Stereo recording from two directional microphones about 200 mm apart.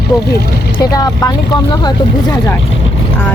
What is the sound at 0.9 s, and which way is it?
Speech, 20° left (ahead or behind).